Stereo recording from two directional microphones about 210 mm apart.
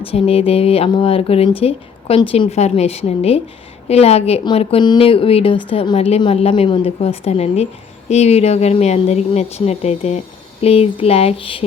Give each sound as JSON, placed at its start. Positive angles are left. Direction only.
{"t": 0.0, "sound": "a woman's voice", "side_deg": 25}